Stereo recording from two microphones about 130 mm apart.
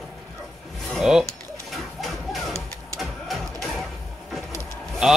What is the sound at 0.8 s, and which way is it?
Music, centre (ahead or behind).